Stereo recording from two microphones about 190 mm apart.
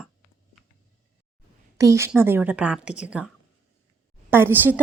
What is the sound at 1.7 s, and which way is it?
A woman's voice, 15° right (ahead or behind).